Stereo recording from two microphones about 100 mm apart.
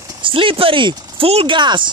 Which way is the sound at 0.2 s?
60° right (ahead or behind).